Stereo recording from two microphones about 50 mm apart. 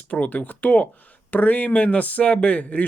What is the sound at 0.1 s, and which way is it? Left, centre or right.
Speech, left.